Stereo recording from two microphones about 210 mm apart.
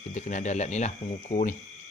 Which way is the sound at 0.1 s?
35° left (ahead or behind).